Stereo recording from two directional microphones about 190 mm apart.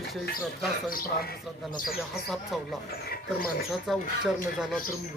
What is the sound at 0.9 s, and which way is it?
Speech, 50° left (ahead or behind).